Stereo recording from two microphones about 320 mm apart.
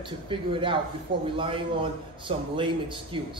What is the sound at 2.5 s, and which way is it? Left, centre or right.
Speech, centre.